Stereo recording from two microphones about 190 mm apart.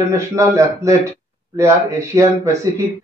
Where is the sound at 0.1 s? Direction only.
15° right (ahead or behind).